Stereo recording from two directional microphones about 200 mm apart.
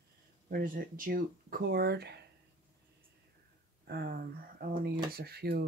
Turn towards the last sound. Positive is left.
turn(degrees=-50)  # may be behind; listen again after turning